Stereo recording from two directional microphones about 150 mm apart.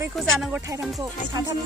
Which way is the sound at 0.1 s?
Centre (ahead or behind).